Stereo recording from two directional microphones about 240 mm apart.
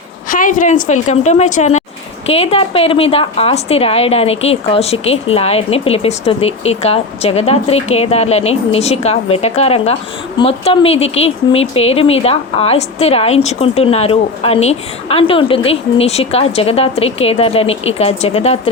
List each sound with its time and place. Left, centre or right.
0.3 s a woman's voice: left